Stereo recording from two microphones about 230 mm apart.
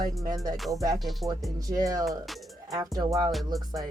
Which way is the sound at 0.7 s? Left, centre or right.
Centre.